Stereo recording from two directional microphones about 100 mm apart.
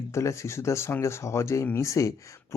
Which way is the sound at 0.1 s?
30° left (ahead or behind).